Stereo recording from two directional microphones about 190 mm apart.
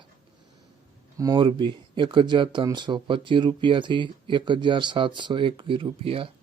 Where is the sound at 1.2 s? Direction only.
20° right (ahead or behind).